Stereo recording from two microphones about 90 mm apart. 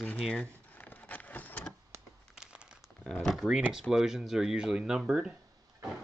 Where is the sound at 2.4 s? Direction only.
10° right (ahead or behind).